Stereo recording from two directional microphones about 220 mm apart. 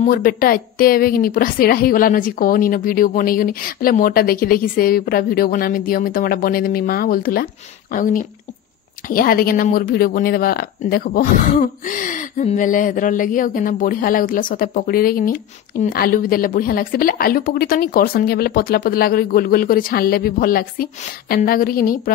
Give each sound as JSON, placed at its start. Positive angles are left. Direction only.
{"t": 0.0, "sound": "a woman's voice", "side_deg": 40}